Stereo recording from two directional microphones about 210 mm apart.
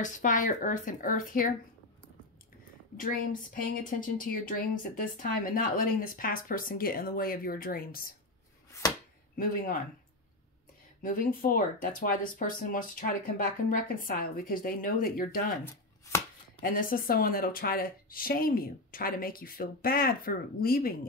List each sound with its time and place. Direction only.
0.0 s speech: 35° left (ahead or behind)
3.0 s a woman's voice: 40° left (ahead or behind)
9.4 s speech: 40° left (ahead or behind)
11.0 s a woman's voice: 40° left (ahead or behind)
16.6 s a woman's voice: 45° left (ahead or behind)